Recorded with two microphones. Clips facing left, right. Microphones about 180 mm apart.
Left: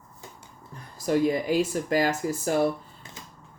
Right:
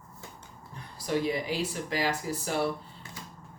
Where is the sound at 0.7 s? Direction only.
45° left (ahead or behind).